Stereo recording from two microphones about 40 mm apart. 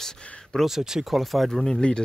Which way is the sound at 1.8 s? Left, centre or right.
Left.